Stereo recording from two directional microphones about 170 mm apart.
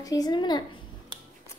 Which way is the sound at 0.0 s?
20° left (ahead or behind).